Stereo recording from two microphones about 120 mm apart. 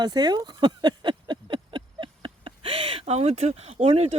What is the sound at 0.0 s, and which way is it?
Speech, 35° right (ahead or behind).